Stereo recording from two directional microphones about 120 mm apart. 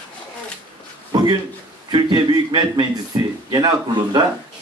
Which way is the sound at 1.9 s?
40° right (ahead or behind).